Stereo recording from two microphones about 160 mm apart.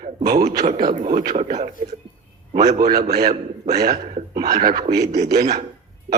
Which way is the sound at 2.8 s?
75° right (ahead or behind).